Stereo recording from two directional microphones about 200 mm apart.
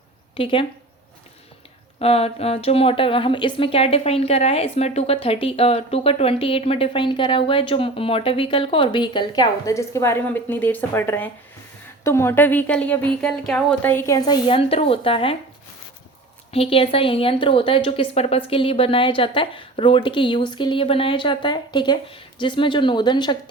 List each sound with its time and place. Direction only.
0.3 s speech: 25° left (ahead or behind)
2.0 s a woman's voice: 30° left (ahead or behind)
16.5 s speech: 30° left (ahead or behind)